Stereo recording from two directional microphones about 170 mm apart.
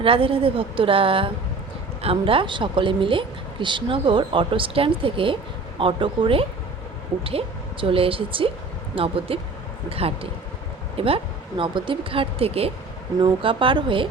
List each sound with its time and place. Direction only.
0.0 s a woman's voice: 30° right (ahead or behind)